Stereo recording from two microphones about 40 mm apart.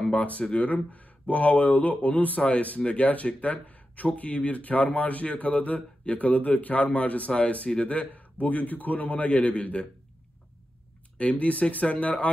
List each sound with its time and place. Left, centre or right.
0.0 s speech: left
11.1 s speech: left